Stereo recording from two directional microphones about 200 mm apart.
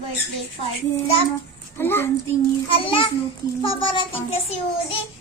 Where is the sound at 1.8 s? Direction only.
10° left (ahead or behind).